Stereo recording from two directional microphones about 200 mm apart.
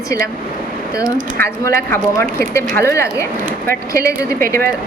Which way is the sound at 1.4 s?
10° left (ahead or behind).